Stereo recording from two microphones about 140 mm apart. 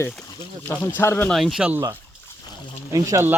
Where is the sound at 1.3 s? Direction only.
Centre (ahead or behind).